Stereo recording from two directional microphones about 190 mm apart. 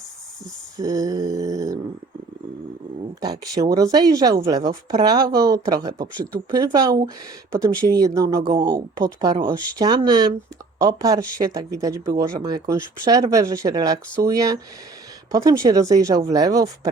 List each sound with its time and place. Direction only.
0.8 s a sound: 20° right (ahead or behind)
3.2 s a woman's voice: 20° right (ahead or behind)
5.1 s speech: 55° right (ahead or behind)
5.4 s a woman's voice: 15° right (ahead or behind)